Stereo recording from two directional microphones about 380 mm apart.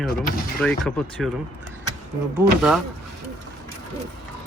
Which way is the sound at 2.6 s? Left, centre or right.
Centre.